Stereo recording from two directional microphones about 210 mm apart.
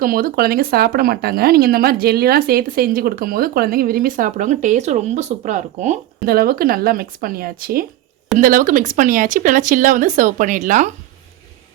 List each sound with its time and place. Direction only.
0.0 s speech: 45° right (ahead or behind)